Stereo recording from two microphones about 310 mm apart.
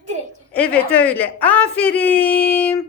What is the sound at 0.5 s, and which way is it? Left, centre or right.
A woman's voice, centre.